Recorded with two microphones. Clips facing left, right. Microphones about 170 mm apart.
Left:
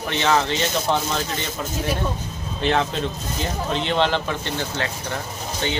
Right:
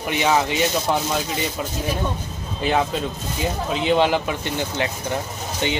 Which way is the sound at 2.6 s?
5° right (ahead or behind).